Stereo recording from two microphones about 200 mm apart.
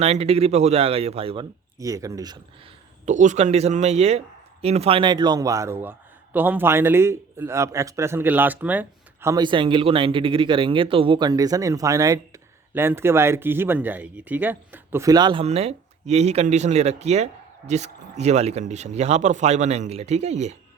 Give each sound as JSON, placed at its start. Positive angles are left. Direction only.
{"t": 0.0, "sound": "speech", "side_deg": -30}
{"t": 1.8, "sound": "a man's voice", "side_deg": -15}
{"t": 3.1, "sound": "a man's voice", "side_deg": -35}